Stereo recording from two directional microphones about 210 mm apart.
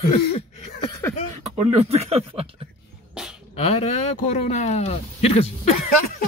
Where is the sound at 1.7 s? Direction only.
30° right (ahead or behind).